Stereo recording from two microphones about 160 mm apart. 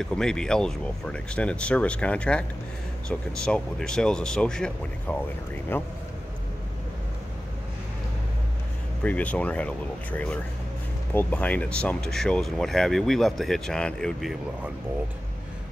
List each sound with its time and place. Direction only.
0.0 s speech: 5° left (ahead or behind)
9.0 s speech: 10° left (ahead or behind)